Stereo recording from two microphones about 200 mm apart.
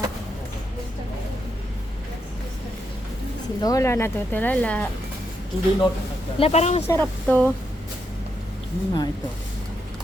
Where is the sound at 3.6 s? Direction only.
15° left (ahead or behind).